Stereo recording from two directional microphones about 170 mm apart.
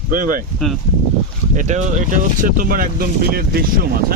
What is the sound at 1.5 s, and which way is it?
Speech, 45° right (ahead or behind).